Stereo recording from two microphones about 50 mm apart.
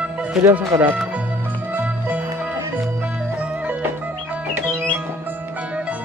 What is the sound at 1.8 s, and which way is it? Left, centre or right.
Music, right.